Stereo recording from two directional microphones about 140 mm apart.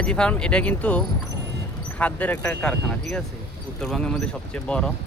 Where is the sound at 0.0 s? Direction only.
5° left (ahead or behind).